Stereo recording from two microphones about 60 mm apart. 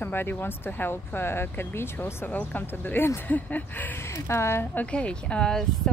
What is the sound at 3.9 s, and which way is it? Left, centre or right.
Speech, left.